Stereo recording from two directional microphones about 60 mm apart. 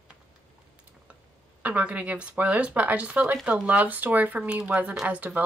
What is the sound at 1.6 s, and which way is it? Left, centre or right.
Speech, right.